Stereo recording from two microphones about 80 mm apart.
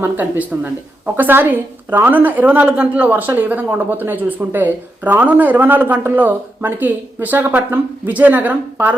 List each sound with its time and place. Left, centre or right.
0.0 s speech: right